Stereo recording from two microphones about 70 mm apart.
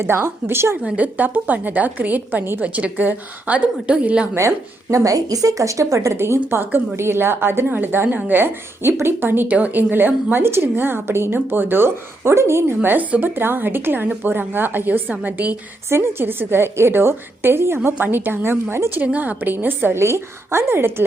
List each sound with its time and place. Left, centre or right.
0.0 s a woman's voice: right
0.8 s a woman's voice: centre
4.4 s a woman's voice: right
15.9 s a woman's voice: right